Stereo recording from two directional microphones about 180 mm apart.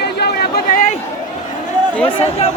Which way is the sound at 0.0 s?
65° left (ahead or behind).